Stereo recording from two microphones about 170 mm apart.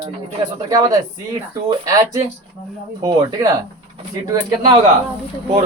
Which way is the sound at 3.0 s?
20° right (ahead or behind).